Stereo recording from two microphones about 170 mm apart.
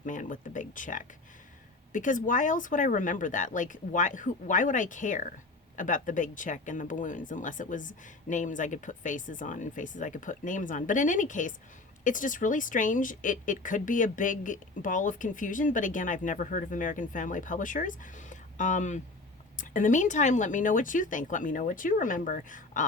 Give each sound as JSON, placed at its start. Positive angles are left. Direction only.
{"t": 0.0, "sound": "speech", "side_deg": 50}